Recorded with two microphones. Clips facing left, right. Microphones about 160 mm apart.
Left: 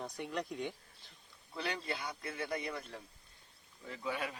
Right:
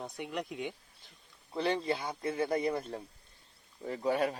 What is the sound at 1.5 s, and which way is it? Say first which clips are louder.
Speech: right 8 dB; 30° right (ahead or behind).